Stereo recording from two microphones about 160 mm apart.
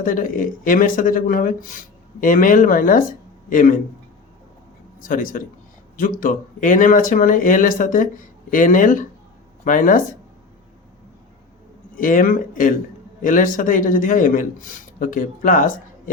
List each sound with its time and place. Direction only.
0.0 s speech: 60° left (ahead or behind)
4.9 s speech: 60° left (ahead or behind)
11.9 s speech: 60° left (ahead or behind)